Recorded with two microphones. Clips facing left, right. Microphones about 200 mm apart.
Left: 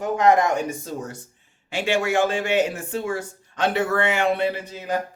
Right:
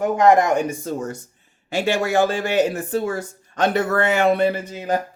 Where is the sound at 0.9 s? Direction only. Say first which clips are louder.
Right 5 dB; 50° right (ahead or behind).